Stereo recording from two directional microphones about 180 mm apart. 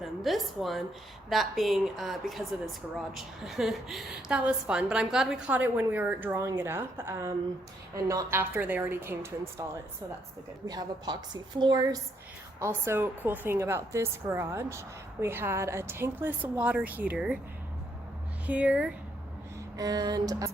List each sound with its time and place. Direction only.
0.0 s a woman's voice: centre (ahead or behind)
10.7 s music: 20° right (ahead or behind)
12.5 s speech: 15° right (ahead or behind)
18.4 s speech: 5° right (ahead or behind)
19.7 s music: 20° right (ahead or behind)